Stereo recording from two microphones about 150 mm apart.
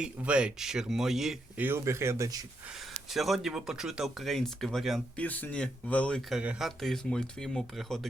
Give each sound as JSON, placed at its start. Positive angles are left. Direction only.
{"t": 0.0, "sound": "speech", "side_deg": -5}
{"t": 1.6, "sound": "speech", "side_deg": -15}
{"t": 3.1, "sound": "speech", "side_deg": 0}
{"t": 6.4, "sound": "speech", "side_deg": -5}